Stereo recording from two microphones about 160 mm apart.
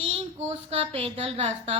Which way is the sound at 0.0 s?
40° right (ahead or behind).